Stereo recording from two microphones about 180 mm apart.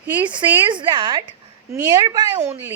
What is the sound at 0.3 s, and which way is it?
A woman's voice, 25° right (ahead or behind).